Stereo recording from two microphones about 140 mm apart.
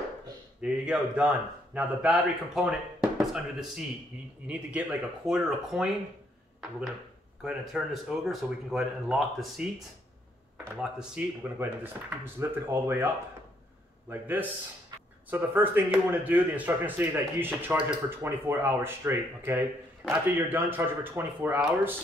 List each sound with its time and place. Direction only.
0.6 s speech: 10° right (ahead or behind)
7.4 s speech: 5° right (ahead or behind)
11.4 s speech: 15° right (ahead or behind)
14.2 s speech: 15° right (ahead or behind)